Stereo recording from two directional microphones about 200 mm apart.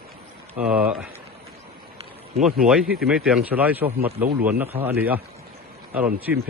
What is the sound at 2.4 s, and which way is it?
A man's voice, centre (ahead or behind).